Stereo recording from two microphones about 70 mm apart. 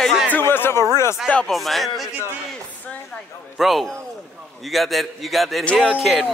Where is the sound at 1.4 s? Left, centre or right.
Centre.